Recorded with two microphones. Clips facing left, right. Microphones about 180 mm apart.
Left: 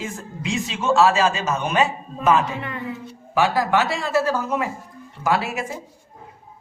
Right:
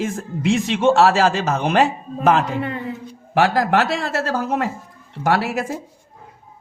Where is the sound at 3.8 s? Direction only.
70° right (ahead or behind).